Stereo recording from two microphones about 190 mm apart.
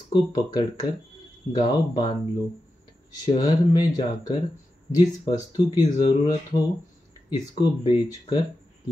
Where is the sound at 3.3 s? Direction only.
20° left (ahead or behind).